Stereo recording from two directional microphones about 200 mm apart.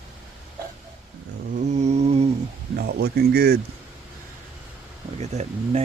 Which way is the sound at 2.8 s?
55° right (ahead or behind).